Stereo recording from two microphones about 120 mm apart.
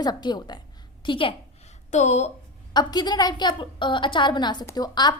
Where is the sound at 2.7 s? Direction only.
35° left (ahead or behind).